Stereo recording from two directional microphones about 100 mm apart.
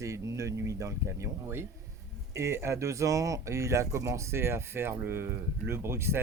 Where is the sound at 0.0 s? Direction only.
30° right (ahead or behind).